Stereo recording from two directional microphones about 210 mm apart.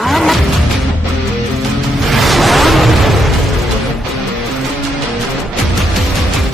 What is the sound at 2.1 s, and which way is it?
Music, centre (ahead or behind).